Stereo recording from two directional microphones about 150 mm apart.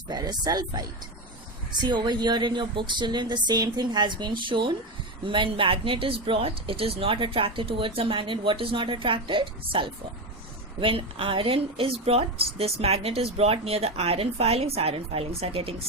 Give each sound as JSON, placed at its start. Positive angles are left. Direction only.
{"t": 0.1, "sound": "a woman's voice", "side_deg": -25}